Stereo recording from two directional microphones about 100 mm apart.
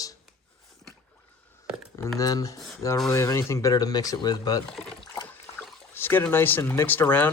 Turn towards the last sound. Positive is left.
turn(degrees=20)  # may be behind; listen again after turning